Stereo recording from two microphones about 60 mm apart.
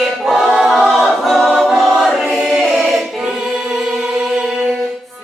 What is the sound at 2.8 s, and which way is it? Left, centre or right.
Choir, centre.